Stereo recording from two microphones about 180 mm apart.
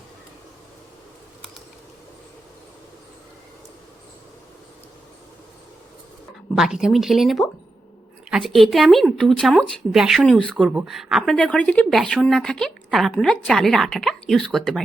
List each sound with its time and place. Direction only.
6.6 s speech: 5° right (ahead or behind)